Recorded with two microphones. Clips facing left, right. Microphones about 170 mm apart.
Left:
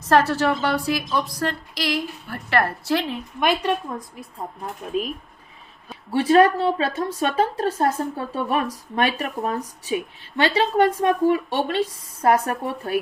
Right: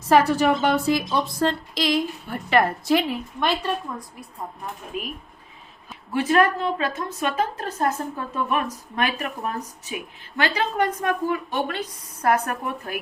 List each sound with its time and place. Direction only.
0.0 s a woman's voice: 10° right (ahead or behind)
3.4 s a woman's voice: 15° left (ahead or behind)
5.9 s a woman's voice: 30° left (ahead or behind)